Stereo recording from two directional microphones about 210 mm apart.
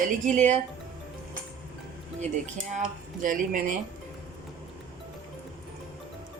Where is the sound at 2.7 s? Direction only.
40° right (ahead or behind).